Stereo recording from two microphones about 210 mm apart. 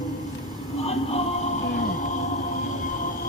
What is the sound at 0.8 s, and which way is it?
Music, 30° left (ahead or behind).